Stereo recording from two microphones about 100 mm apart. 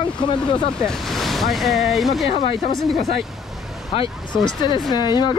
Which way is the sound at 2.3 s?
85° left.